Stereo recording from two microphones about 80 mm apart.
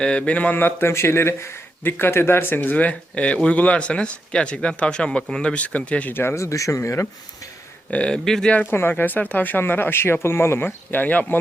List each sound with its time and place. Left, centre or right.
0.0 s speech: centre; by 7.1 s left
7.9 s speech: centre
8.5 s speech: left